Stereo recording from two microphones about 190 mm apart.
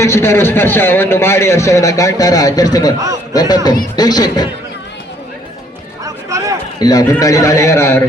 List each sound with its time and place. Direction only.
0.0 s a man's voice: 15° left (ahead or behind)
6.2 s a sound: 15° right (ahead or behind)
6.7 s a man's voice: 20° left (ahead or behind)